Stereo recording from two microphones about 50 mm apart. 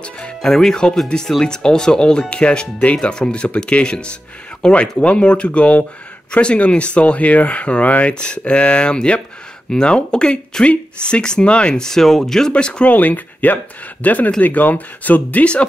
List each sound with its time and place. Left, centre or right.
0.0 s speech: centre
12.9 s speech: left